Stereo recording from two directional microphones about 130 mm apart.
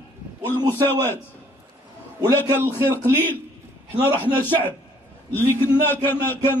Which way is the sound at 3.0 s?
15° left (ahead or behind).